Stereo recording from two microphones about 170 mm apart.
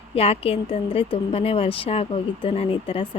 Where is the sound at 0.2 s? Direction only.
35° left (ahead or behind).